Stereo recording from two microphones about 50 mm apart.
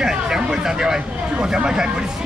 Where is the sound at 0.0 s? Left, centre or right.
Centre.